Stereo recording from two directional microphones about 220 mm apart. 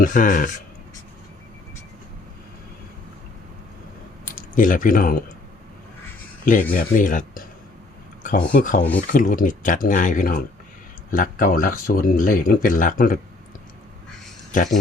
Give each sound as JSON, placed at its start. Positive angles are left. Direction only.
{"t": 0.0, "sound": "speech", "side_deg": 35}
{"t": 4.3, "sound": "speech", "side_deg": 35}
{"t": 6.4, "sound": "speech", "side_deg": 40}
{"t": 8.4, "sound": "speech", "side_deg": 40}
{"t": 14.5, "sound": "speech", "side_deg": 35}